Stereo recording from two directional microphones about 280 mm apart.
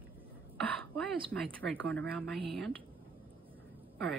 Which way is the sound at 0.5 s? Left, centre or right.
Centre.